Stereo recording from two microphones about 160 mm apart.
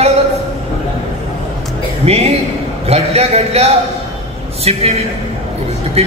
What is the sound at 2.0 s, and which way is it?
Speech, 40° right (ahead or behind).